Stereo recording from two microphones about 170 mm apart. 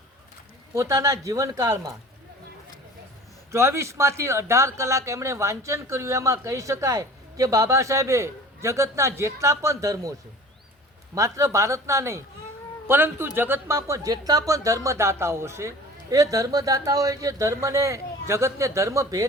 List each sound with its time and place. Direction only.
0.7 s speech: 15° right (ahead or behind)
3.5 s speech: 15° right (ahead or behind)